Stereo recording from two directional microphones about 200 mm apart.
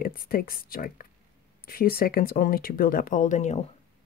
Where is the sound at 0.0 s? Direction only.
45° left (ahead or behind).